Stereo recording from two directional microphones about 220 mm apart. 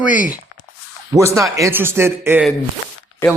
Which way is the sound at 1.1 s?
15° right (ahead or behind).